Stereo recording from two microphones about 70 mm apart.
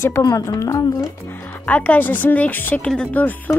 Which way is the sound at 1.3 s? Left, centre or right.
Left.